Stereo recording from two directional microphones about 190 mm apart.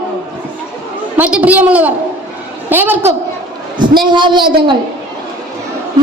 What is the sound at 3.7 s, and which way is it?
A woman's voice, 25° right (ahead or behind).